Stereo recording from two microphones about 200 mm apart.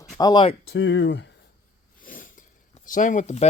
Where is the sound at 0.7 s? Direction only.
65° left (ahead or behind).